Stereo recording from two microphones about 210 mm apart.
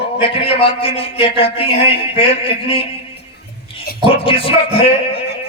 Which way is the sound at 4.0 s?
25° left (ahead or behind).